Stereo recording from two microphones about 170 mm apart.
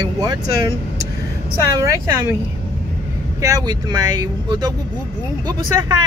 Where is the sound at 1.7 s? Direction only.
15° right (ahead or behind).